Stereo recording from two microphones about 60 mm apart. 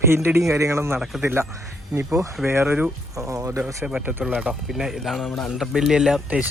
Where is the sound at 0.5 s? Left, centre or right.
Right.